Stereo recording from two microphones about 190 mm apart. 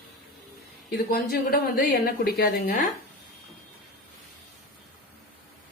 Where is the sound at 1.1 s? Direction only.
55° left (ahead or behind).